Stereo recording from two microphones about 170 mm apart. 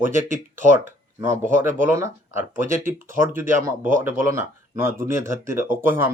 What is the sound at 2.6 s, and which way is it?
Speech, 55° right (ahead or behind).